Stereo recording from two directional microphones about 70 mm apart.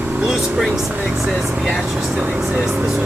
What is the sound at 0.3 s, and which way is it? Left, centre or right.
Speech, centre.